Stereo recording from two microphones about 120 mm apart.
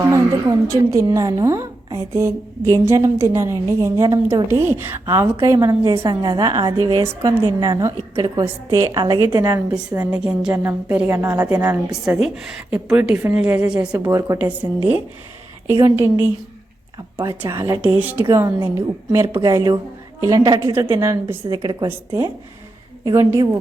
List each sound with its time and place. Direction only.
0.7 s a woman's voice: 25° right (ahead or behind)
10.0 s a woman's voice: 10° right (ahead or behind)
11.9 s a woman's voice: 5° right (ahead or behind)
13.9 s a woman's voice: 25° right (ahead or behind)
14.3 s a woman's voice: 10° right (ahead or behind); by 20.7 s 35° right (ahead or behind)
20.7 s a woman's voice: 20° right (ahead or behind)
21.5 s a woman's voice: 35° right (ahead or behind)
21.8 s a woman's voice: 20° right (ahead or behind)